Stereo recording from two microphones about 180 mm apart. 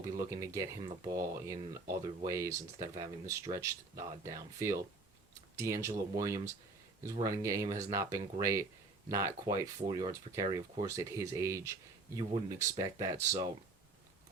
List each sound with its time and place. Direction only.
0.2 s speech: 15° right (ahead or behind)